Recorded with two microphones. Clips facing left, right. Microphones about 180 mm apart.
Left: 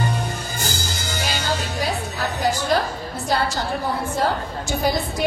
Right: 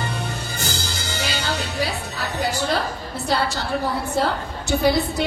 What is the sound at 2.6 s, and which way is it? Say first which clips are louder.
A woman's voice: left 2 dB; 65° right (ahead or behind).